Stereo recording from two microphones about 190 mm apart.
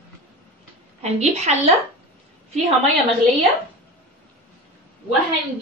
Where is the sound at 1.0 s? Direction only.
35° right (ahead or behind).